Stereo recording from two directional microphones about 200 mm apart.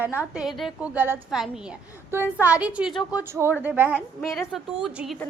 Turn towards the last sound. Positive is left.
turn(degrees=0)  # may be behind; listen again after turning